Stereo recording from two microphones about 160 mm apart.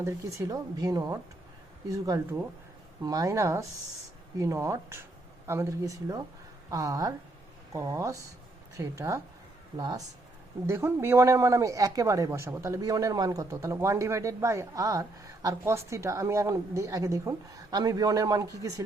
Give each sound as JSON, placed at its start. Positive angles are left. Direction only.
{"t": 0.0, "sound": "speech", "side_deg": -20}
{"t": 10.7, "sound": "speech", "side_deg": -15}